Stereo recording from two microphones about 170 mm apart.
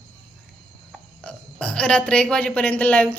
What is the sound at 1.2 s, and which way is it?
Speech, 5° left (ahead or behind).